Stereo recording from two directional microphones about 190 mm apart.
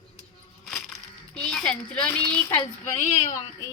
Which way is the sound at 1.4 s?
5° left (ahead or behind).